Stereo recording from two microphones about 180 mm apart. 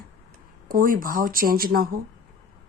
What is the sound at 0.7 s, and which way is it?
A woman's voice, 50° right (ahead or behind).